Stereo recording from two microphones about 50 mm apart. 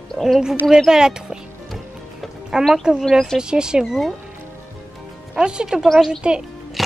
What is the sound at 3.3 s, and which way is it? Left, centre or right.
Speech, centre.